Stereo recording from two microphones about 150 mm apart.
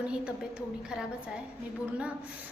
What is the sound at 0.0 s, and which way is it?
A woman's voice, 5° right (ahead or behind).